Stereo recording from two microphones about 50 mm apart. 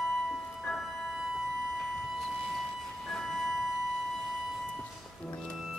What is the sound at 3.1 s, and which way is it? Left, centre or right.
Music, centre.